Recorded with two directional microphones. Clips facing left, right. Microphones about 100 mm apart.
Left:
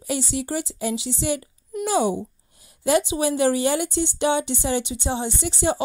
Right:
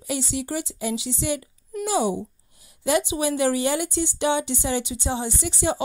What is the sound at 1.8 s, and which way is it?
Speech, 50° left (ahead or behind).